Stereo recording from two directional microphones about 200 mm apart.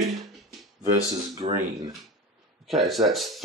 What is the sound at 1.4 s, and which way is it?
Speech, 15° right (ahead or behind).